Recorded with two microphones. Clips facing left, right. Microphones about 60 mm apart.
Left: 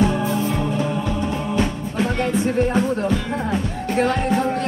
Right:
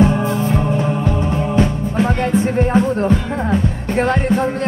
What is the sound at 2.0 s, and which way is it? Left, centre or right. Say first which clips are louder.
Speech: right 4 dB; right.